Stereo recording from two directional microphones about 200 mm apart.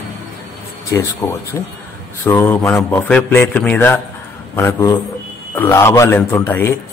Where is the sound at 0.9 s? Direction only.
15° left (ahead or behind).